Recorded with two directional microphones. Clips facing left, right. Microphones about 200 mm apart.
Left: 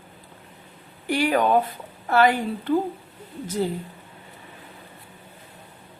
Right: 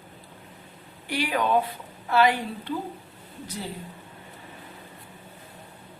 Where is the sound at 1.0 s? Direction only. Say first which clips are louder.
Left 5 dB; 50° left (ahead or behind).